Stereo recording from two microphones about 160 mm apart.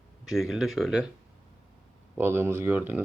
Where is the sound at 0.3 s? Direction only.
Centre (ahead or behind).